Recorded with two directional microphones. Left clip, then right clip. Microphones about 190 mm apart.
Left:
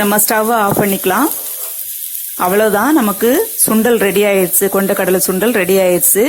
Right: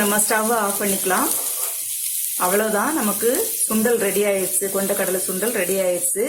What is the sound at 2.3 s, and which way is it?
Speech, 45° left (ahead or behind).